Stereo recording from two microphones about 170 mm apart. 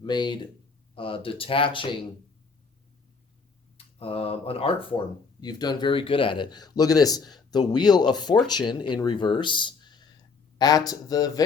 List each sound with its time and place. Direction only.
0.0 s speech: 25° left (ahead or behind)
3.8 s speech: 35° left (ahead or behind)